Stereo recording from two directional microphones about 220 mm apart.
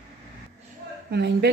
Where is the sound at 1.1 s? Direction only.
50° right (ahead or behind).